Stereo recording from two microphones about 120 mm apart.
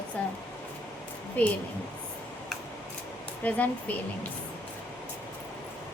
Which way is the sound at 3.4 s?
15° left (ahead or behind).